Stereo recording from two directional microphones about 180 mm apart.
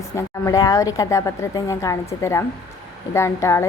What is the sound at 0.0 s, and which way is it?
A woman's voice, 15° left (ahead or behind).